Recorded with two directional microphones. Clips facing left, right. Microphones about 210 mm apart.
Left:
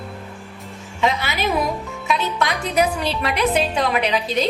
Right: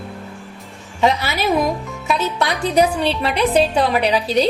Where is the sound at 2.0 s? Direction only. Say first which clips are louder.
Right 2 dB; 35° right (ahead or behind).